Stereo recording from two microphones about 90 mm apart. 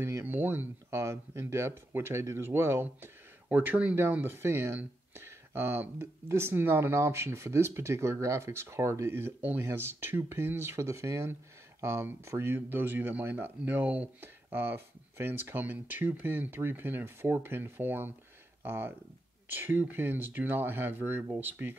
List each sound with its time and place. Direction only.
0.0 s speech: 25° right (ahead or behind)